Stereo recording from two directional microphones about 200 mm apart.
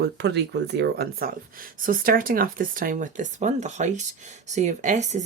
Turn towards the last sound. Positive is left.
turn(degrees=-35)  # may be behind; listen again after turning